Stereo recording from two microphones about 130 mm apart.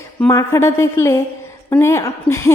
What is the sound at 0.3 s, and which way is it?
A woman's voice, 20° left (ahead or behind).